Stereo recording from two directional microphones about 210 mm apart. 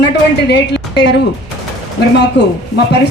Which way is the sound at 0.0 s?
55° left (ahead or behind).